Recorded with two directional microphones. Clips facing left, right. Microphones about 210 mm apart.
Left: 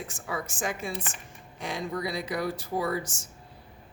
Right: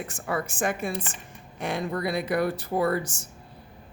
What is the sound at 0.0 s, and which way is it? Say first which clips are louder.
Speech: right 5 dB; 60° right (ahead or behind).